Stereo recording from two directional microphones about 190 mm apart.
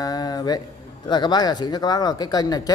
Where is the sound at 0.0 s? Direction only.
20° left (ahead or behind).